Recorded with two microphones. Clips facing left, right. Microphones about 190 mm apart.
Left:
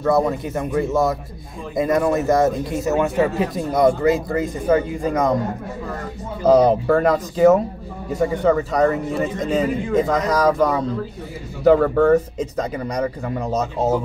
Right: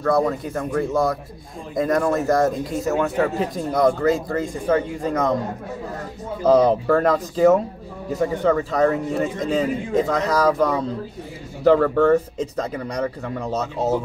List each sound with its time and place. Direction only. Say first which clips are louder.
0.1 s speech: left 1 dB; 10° left (ahead or behind)
2.9 s speech: left 2 dB; 20° left (ahead or behind)
3.5 s speech: left 2 dB; 5° left (ahead or behind)
6.4 s speech: left 2 dB; 10° left (ahead or behind)